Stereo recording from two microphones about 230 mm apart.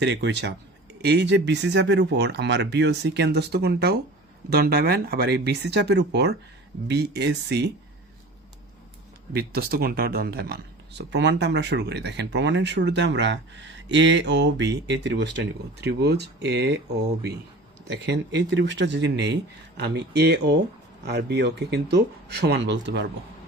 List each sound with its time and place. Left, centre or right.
0.0 s speech: right
9.3 s speech: right
17.8 s speech: right